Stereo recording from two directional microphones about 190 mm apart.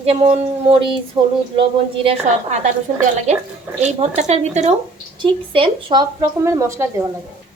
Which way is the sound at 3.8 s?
35° right (ahead or behind).